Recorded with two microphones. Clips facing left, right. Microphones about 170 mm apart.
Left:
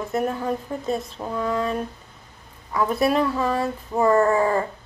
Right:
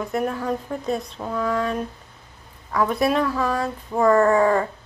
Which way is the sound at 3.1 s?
30° left (ahead or behind).